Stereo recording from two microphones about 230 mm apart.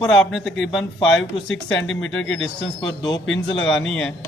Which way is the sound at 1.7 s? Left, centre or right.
Left.